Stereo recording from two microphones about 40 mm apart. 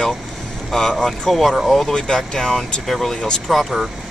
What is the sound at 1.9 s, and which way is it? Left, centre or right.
Speech, centre.